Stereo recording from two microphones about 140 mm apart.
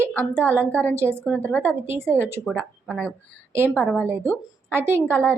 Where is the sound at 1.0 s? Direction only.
15° right (ahead or behind).